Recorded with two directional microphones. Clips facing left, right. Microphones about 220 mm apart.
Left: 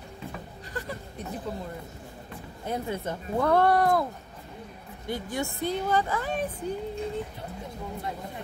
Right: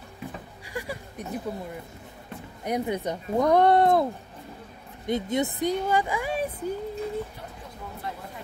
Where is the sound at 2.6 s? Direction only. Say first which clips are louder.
Right 4 dB; 15° right (ahead or behind).